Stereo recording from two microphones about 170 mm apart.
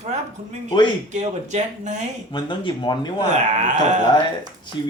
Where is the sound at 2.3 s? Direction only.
25° left (ahead or behind).